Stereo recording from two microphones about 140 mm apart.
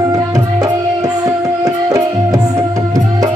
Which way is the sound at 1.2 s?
25° right (ahead or behind).